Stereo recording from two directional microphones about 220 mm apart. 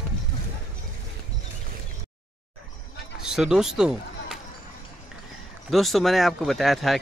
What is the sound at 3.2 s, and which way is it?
Run, 5° right (ahead or behind).